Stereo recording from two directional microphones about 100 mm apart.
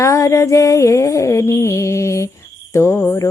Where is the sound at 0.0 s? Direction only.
30° left (ahead or behind).